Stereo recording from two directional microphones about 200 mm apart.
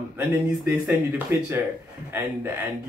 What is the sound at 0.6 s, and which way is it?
Speech, 10° right (ahead or behind).